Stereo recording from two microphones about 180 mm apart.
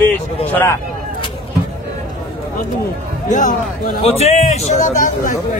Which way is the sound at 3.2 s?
45° left (ahead or behind).